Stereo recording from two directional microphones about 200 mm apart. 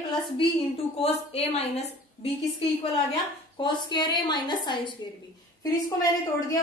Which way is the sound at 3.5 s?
25° left (ahead or behind).